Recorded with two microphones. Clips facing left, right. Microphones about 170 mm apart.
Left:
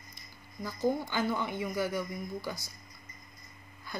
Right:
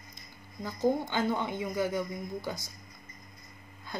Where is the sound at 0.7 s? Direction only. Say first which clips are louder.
Right 2 dB; 20° right (ahead or behind).